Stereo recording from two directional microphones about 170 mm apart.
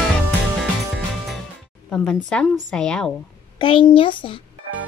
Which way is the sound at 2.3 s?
5° left (ahead or behind).